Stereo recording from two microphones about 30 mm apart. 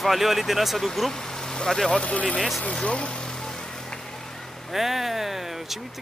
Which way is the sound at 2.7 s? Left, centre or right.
Left.